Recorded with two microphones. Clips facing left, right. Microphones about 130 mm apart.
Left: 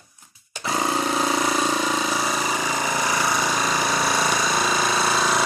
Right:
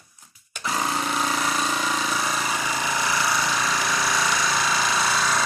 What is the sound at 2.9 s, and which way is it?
Jackhammer, 15° left (ahead or behind).